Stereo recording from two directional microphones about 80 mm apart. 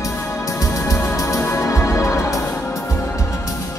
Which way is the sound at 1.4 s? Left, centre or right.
Left.